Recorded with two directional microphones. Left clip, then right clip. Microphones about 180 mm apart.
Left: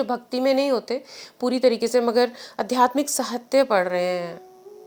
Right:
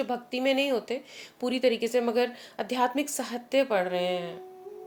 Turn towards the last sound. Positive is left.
turn(degrees=30)  # may be behind; listen again after turning